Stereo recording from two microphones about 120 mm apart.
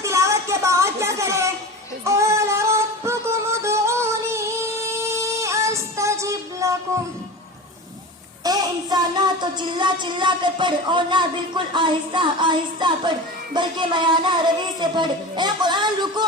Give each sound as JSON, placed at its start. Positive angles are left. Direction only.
{"t": 0.0, "sound": "a sound", "side_deg": -25}
{"t": 2.0, "sound": "music", "side_deg": -25}
{"t": 8.4, "sound": "child singing", "side_deg": -30}